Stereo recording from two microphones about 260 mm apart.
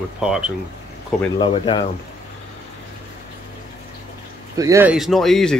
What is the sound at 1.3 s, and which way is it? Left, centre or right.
Speech, centre.